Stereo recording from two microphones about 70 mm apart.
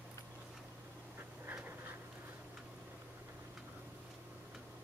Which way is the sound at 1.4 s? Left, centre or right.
Right.